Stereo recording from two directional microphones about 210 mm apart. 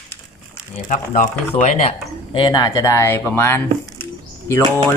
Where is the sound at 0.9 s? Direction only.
35° left (ahead or behind).